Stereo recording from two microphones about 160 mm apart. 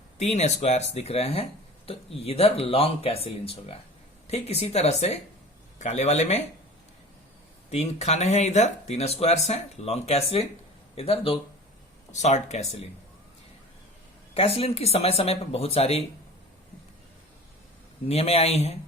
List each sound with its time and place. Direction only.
0.2 s speech: 45° left (ahead or behind)
7.7 s speech: 45° left (ahead or behind)
14.3 s speech: 40° left (ahead or behind)
18.1 s speech: 40° left (ahead or behind)